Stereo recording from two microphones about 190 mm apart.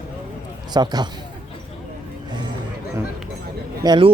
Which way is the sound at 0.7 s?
20° right (ahead or behind).